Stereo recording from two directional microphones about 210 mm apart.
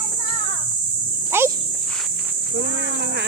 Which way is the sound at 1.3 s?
10° right (ahead or behind).